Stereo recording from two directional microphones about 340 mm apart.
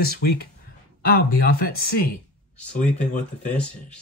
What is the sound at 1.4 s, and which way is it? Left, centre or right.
Speech, left.